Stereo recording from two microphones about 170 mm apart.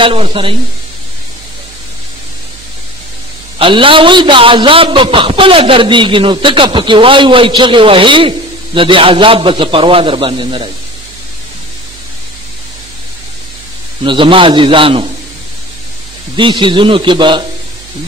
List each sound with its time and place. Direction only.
0.0 s a man's voice: 30° right (ahead or behind)
3.5 s a man's voice: 30° right (ahead or behind)
14.0 s a man's voice: 30° right (ahead or behind)
16.3 s a man's voice: 30° right (ahead or behind)